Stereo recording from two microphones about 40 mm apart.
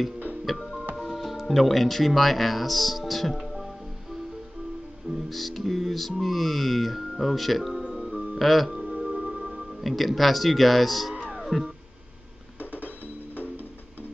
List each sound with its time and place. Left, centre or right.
0.6 s music: left
0.9 s speech: centre
5.1 s music: centre
8.7 s music: right
9.7 s music: centre
11.1 s music: centre
12.5 s music: left